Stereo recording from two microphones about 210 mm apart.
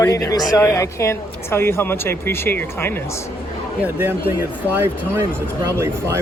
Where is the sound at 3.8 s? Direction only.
10° right (ahead or behind).